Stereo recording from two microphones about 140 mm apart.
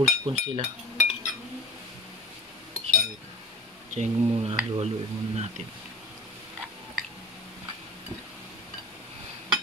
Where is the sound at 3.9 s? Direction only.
55° right (ahead or behind).